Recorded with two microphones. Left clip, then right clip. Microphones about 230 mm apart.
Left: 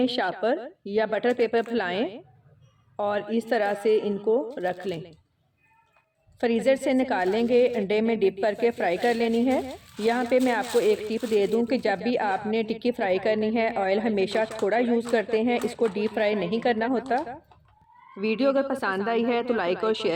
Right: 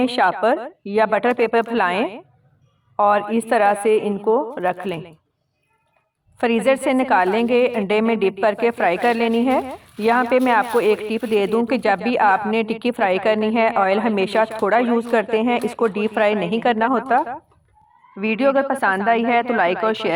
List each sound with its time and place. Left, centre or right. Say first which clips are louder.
0.0 s a woman's voice: right 8 dB; centre
6.4 s a woman's voice: right 5 dB; centre